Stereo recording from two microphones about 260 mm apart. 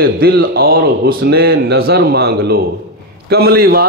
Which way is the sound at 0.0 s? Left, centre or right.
Right.